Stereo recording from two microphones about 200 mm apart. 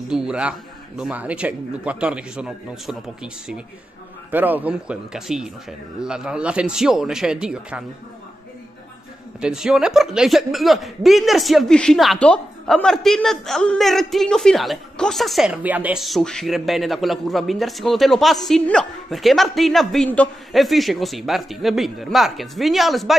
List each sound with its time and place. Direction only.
0.1 s speech: 5° right (ahead or behind)
9.4 s speech: 5° right (ahead or behind)